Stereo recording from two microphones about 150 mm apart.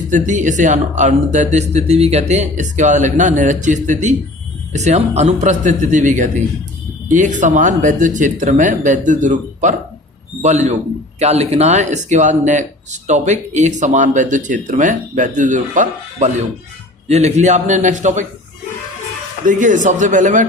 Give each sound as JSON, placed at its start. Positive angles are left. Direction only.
{"t": 0.1, "sound": "speech", "side_deg": -55}
{"t": 19.5, "sound": "speech", "side_deg": -60}